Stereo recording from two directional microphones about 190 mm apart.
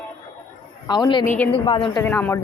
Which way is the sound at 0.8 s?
20° left (ahead or behind).